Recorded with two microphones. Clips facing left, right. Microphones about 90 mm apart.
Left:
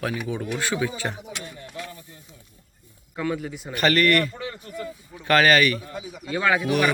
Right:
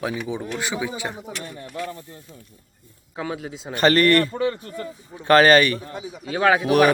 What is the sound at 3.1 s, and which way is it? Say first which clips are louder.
Speech: left 2 dB; 20° right (ahead or behind).